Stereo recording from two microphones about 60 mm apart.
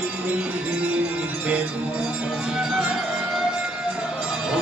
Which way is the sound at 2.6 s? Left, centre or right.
Centre.